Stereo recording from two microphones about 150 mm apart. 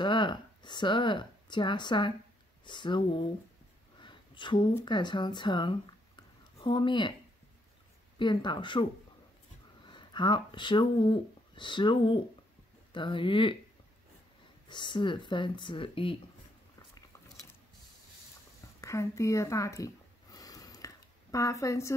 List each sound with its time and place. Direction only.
0.0 s speech: 30° left (ahead or behind)
4.0 s speech: 35° left (ahead or behind)
8.2 s speech: 30° left (ahead or behind)
9.8 s speech: 30° left (ahead or behind)
14.7 s speech: 30° left (ahead or behind)
18.8 s a sound: 20° left (ahead or behind)